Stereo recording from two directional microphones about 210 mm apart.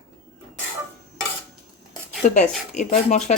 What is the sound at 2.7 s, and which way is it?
Speech, 35° left (ahead or behind).